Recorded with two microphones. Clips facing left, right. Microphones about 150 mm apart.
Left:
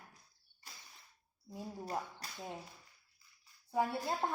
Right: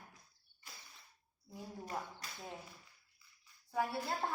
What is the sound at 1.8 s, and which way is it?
Speech, 30° left (ahead or behind).